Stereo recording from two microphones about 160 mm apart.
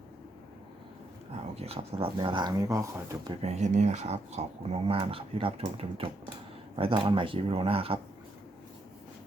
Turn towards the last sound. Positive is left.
turn(degrees=-35)  # may be behind; listen again after turning